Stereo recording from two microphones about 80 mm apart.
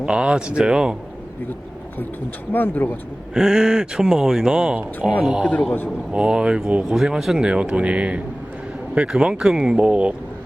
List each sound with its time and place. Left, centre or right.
0.0 s speech: centre
2.5 s speech: left
3.3 s speech: centre